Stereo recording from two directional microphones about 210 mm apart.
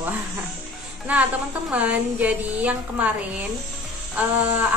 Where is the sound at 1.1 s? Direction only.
5° right (ahead or behind).